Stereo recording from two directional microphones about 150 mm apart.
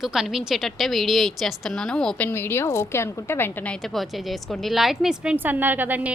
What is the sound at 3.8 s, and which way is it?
A woman's voice, centre (ahead or behind).